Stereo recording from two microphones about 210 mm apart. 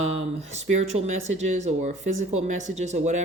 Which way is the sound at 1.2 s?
35° right (ahead or behind).